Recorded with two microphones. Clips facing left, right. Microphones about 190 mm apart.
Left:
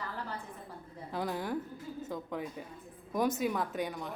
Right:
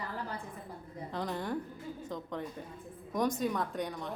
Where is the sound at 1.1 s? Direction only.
5° left (ahead or behind).